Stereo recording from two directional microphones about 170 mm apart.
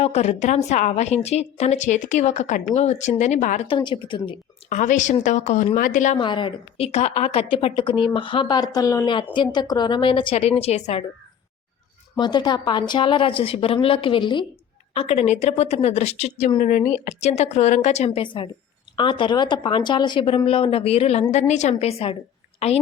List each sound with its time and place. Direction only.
0.0 s a woman's voice: 40° left (ahead or behind)
3.7 s a woman's voice: 30° left (ahead or behind)
4.7 s a woman's voice: 45° left (ahead or behind)
6.1 s a woman's voice: 30° left (ahead or behind)
12.1 s a woman's voice: 25° left (ahead or behind)
14.9 s a woman's voice: 40° left (ahead or behind)